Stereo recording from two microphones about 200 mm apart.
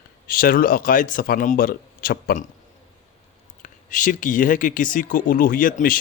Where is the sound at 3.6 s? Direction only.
40° left (ahead or behind).